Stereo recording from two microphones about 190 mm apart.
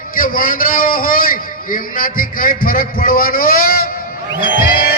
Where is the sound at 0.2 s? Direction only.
45° left (ahead or behind).